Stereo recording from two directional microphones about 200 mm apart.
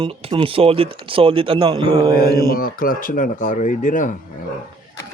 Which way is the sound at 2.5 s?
45° left (ahead or behind).